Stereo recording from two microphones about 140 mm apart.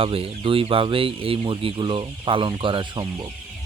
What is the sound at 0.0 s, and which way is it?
Speech, 40° right (ahead or behind).